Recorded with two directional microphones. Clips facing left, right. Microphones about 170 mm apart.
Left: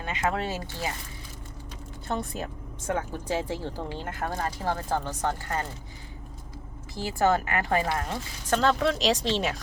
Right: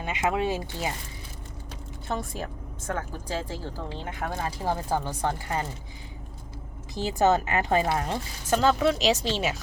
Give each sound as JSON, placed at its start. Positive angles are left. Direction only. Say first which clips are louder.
{"t": 0.0, "sound": "speech", "louder": "right 2 dB", "side_deg": -10}
{"t": 2.0, "sound": "speech", "louder": "left 1 dB", "side_deg": 0}
{"t": 2.8, "sound": "speech", "louder": "left 3 dB", "side_deg": 20}
{"t": 4.1, "sound": "speech", "louder": "even", "side_deg": 0}
{"t": 4.4, "sound": "speech", "louder": "right 3 dB", "side_deg": -10}
{"t": 6.9, "sound": "speech", "louder": "right 2 dB", "side_deg": -20}
{"t": 8.4, "sound": "speech", "louder": "right 2 dB", "side_deg": -5}